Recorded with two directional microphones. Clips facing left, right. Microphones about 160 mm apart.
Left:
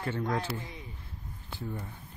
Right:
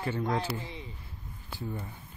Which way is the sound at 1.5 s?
5° right (ahead or behind).